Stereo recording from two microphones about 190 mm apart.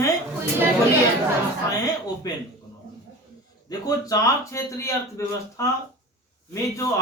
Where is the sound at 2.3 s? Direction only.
20° left (ahead or behind).